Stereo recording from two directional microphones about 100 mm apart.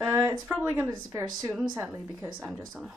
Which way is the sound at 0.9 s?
35° right (ahead or behind).